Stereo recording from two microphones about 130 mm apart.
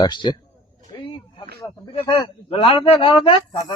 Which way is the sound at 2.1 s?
50° left (ahead or behind).